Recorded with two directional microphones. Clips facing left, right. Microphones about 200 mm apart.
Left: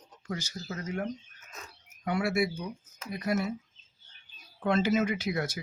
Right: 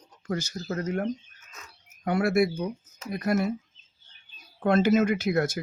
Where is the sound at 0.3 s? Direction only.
45° right (ahead or behind).